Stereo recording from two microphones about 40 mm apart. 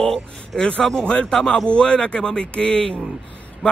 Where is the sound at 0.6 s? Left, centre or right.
Left.